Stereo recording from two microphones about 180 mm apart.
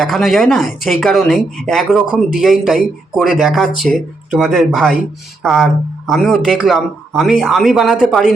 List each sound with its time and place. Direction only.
0.0 s speech: centre (ahead or behind)